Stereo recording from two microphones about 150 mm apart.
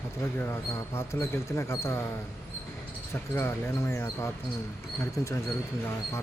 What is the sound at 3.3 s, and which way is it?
Speech, 20° left (ahead or behind).